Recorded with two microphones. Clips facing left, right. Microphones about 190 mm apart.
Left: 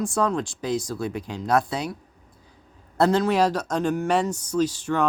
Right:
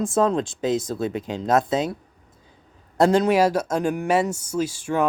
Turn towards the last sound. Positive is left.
turn(degrees=-10)  # may be behind; listen again after turning